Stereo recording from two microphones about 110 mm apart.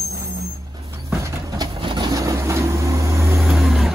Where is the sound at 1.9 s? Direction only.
30° right (ahead or behind).